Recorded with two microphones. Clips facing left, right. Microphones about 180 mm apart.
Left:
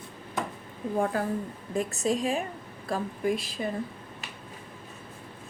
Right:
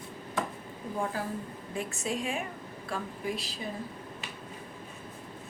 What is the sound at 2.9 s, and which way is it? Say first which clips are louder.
Speech: left 7 dB; 50° left (ahead or behind).